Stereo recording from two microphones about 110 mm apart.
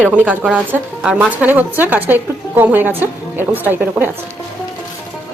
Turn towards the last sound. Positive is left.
turn(degrees=-20)  # may be behind; listen again after turning